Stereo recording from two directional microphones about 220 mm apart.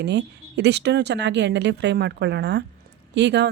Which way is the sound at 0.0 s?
50° right (ahead or behind).